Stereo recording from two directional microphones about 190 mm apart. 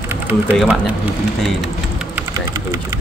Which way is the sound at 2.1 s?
15° right (ahead or behind).